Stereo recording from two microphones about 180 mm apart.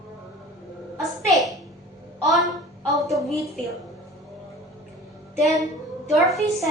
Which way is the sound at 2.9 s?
Centre (ahead or behind).